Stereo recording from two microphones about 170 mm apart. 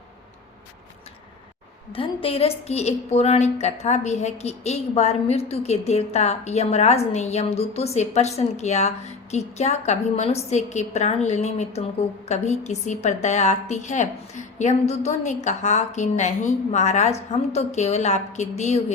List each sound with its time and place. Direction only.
1.9 s a woman's voice: 35° left (ahead or behind)